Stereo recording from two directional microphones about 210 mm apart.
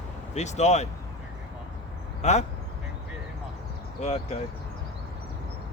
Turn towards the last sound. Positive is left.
turn(degrees=30)  # may be behind; listen again after turning